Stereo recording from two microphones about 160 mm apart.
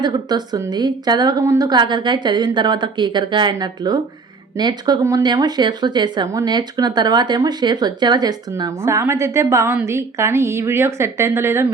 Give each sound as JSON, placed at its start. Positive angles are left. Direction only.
{"t": 0.0, "sound": "speech", "side_deg": -25}